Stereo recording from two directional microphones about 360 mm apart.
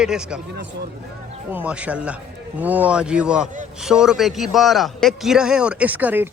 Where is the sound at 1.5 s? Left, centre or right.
Centre.